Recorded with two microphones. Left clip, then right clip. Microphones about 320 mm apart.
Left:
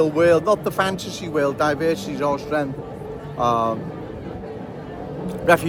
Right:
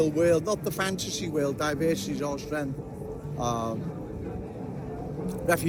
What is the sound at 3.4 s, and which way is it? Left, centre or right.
Speech, left.